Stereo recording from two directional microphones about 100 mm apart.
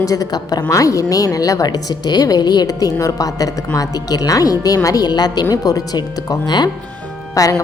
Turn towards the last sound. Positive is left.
turn(degrees=35)  # may be behind; listen again after turning